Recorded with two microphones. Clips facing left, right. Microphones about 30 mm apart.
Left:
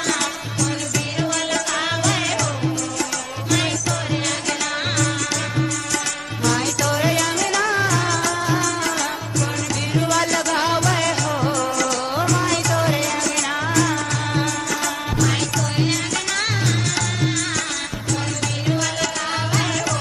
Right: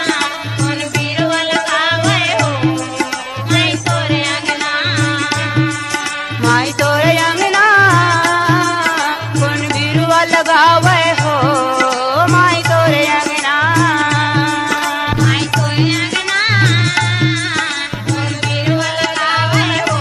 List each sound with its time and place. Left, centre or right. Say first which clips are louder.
1.2 s music: right 9 dB; right
6.4 s music: right 7 dB; right
9.9 s music: right 8 dB; right
13.9 s music: right 9 dB; right
18.7 s music: right 6 dB; right